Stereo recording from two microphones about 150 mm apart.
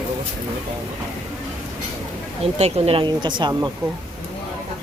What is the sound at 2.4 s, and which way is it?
Speech, 45° right (ahead or behind).